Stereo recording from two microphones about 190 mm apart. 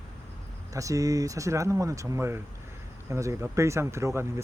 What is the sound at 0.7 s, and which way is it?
Speech, 15° right (ahead or behind).